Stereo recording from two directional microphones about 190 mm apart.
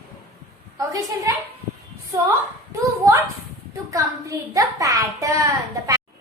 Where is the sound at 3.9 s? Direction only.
15° right (ahead or behind).